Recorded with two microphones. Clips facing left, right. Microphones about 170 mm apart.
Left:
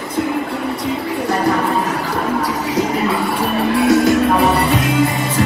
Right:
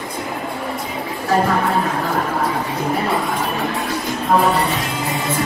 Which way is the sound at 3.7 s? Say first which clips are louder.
Left 11 dB; 80° left.